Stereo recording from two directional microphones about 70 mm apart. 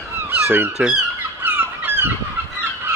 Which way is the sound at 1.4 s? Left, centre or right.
Right.